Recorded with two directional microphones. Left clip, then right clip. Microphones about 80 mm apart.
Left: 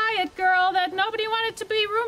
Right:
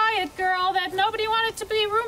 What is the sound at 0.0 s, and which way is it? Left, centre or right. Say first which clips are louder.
A woman's voice: even; left.